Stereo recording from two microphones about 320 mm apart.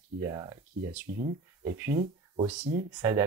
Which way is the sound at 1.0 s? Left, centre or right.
Right.